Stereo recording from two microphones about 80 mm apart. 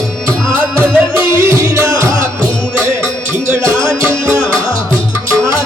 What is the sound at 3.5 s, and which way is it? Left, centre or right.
Music, right.